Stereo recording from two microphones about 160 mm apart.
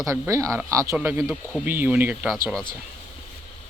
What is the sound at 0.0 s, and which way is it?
Speech, 20° right (ahead or behind).